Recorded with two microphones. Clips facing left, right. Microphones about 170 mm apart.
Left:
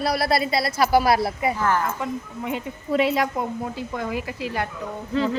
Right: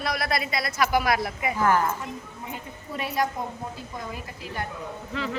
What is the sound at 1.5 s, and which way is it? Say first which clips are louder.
Speech: right 5 dB; 15° right (ahead or behind).